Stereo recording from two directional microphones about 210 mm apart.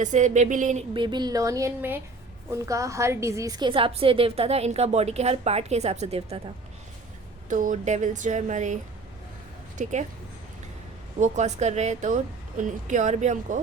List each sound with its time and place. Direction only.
0.0 s a woman's voice: 35° right (ahead or behind)
7.5 s a woman's voice: 40° right (ahead or behind)
11.2 s a woman's voice: 35° right (ahead or behind)